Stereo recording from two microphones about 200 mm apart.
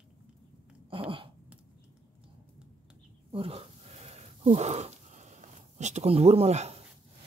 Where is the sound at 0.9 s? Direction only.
25° right (ahead or behind).